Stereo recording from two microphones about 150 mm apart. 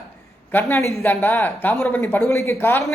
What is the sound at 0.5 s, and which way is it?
Speech, 15° left (ahead or behind).